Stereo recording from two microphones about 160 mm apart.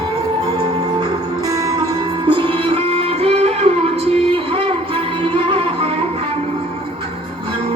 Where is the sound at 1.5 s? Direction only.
20° right (ahead or behind).